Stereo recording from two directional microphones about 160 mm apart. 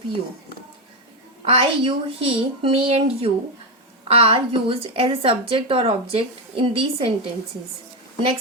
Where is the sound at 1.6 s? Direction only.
35° right (ahead or behind).